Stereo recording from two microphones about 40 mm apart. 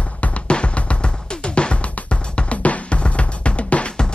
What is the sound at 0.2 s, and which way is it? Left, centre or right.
Music, left.